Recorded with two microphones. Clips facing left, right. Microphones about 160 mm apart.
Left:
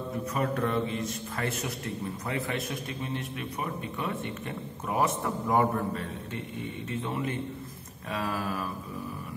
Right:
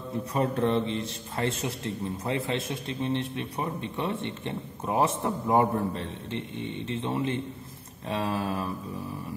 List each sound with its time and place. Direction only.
0.3 s a man's voice: 30° right (ahead or behind)